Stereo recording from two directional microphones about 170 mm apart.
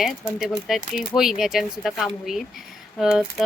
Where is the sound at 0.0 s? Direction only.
Centre (ahead or behind).